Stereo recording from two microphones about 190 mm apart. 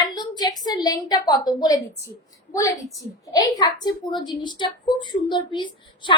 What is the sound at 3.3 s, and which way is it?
A woman's voice, 20° left (ahead or behind).